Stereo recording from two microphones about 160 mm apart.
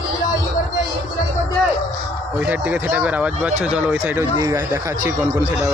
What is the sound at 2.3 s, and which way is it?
Speech, 10° right (ahead or behind).